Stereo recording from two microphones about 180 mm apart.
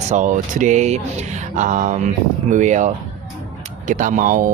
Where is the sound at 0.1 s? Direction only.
45° right (ahead or behind).